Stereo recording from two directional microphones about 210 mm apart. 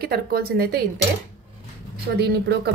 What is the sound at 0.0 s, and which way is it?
Speech, 45° right (ahead or behind).